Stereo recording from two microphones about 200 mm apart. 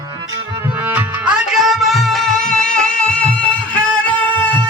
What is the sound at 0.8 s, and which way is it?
Music, 10° right (ahead or behind).